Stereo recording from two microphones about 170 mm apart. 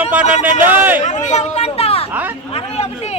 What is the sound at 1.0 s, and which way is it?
Speech, 45° left (ahead or behind).